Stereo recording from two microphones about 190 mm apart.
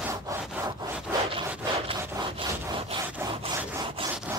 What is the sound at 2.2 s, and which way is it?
Wood, 25° right (ahead or behind).